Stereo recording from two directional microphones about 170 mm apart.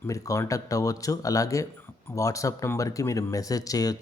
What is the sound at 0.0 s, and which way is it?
Speech, 20° left (ahead or behind).